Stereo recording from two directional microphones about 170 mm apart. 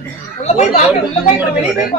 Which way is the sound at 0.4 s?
40° left (ahead or behind).